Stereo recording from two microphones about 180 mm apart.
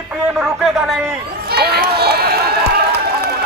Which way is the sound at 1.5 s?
60° right (ahead or behind).